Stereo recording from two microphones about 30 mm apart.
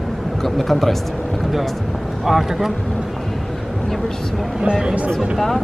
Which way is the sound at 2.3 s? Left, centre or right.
Centre.